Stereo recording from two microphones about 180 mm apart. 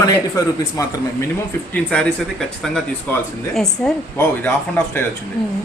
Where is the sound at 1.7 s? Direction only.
5° left (ahead or behind).